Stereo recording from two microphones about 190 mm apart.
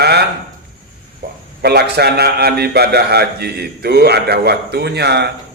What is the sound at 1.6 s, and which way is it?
Mantra, 55° right (ahead or behind).